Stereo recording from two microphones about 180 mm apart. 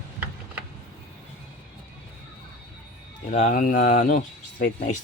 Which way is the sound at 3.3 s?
45° left (ahead or behind).